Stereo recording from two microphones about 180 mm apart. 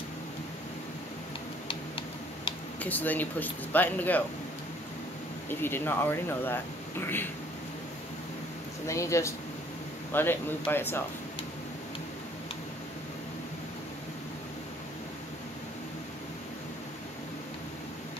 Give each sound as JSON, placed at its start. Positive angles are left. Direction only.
{"t": 1.7, "sound": "tick-tock", "side_deg": 30}
{"t": 2.8, "sound": "speech", "side_deg": 10}
{"t": 5.5, "sound": "speech", "side_deg": 10}
{"t": 8.8, "sound": "speech", "side_deg": 15}